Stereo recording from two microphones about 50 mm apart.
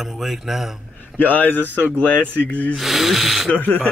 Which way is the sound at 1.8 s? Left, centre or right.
Left.